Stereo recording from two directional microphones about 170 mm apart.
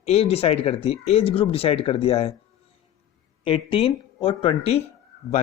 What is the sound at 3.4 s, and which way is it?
Speech, 30° left (ahead or behind).